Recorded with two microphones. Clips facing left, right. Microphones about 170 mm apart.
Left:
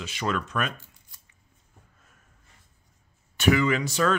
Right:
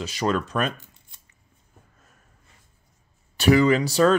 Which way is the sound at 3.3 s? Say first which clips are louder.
Right 5 dB; 35° right (ahead or behind).